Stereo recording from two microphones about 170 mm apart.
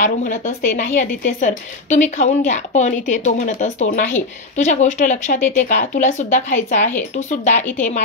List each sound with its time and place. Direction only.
0.0 s speech: 45° left (ahead or behind)